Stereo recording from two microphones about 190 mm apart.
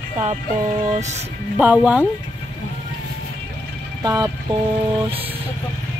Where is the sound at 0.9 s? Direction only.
35° right (ahead or behind).